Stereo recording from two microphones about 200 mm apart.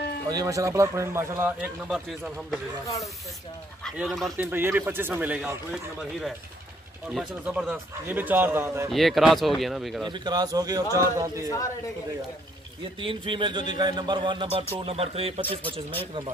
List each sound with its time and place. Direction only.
0.3 s a man's voice: 15° right (ahead or behind); by 2.6 s centre (ahead or behind)
3.8 s a man's voice: centre (ahead or behind)
7.1 s a man's voice: 5° right (ahead or behind)
8.9 s speech: centre (ahead or behind)
10.0 s speech: 20° right (ahead or behind)
13.0 s speech: 25° right (ahead or behind)
15.6 s speech: 10° left (ahead or behind)